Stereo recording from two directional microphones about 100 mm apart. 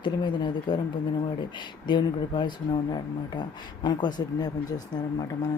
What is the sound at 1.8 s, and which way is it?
Speech, 50° left (ahead or behind).